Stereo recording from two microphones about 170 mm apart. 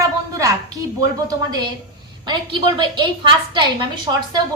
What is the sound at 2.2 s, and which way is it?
A woman's voice, 25° right (ahead or behind).